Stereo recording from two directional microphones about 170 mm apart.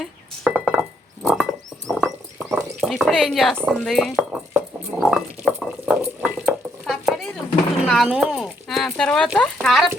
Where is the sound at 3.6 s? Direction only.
5° left (ahead or behind).